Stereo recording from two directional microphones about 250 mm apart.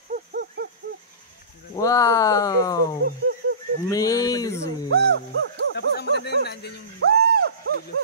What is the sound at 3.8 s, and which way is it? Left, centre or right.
Speech, centre.